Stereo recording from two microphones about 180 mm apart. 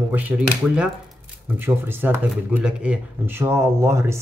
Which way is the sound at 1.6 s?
10° right (ahead or behind).